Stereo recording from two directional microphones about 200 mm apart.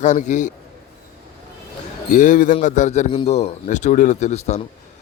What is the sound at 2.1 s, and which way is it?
A man's voice, 40° left (ahead or behind).